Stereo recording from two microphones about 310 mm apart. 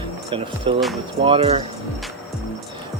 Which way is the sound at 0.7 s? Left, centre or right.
Centre.